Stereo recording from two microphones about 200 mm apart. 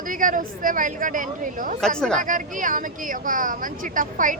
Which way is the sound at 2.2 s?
40° right (ahead or behind).